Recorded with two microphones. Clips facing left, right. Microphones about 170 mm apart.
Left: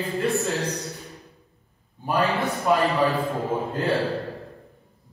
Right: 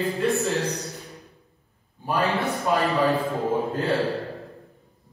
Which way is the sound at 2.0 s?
Centre (ahead or behind).